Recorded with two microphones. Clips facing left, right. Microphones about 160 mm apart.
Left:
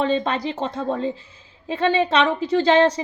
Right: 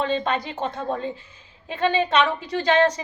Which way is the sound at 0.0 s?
30° left (ahead or behind).